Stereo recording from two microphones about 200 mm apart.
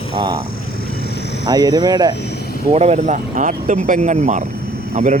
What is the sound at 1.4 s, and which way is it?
Speech, 20° right (ahead or behind).